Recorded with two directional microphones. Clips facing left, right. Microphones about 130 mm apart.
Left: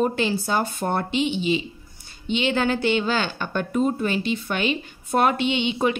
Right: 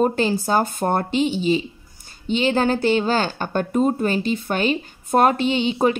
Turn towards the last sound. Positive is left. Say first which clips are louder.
# right 3 dB
turn(degrees=-40)  # may be behind; listen again after turning